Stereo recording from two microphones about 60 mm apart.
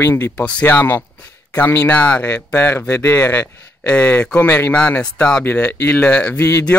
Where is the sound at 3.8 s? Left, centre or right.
Centre.